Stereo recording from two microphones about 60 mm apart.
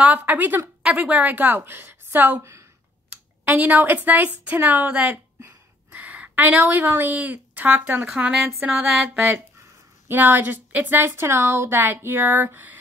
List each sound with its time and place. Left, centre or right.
0.0 s a woman's voice: right
3.1 s clicking: centre
3.5 s a woman's voice: right
10.0 s a woman's voice: right